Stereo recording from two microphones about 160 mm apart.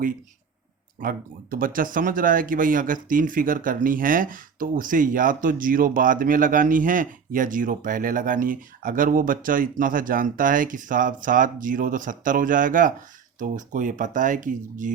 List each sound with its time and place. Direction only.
1.0 s speech: 60° right (ahead or behind)